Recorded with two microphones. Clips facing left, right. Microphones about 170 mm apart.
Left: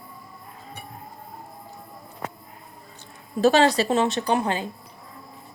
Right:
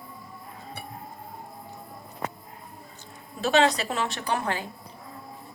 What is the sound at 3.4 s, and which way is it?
Speech, 35° left (ahead or behind).